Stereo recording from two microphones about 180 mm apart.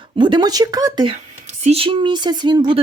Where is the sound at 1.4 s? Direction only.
40° right (ahead or behind).